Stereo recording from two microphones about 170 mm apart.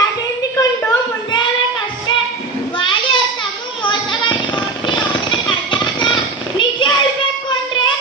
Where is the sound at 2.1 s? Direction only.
25° left (ahead or behind).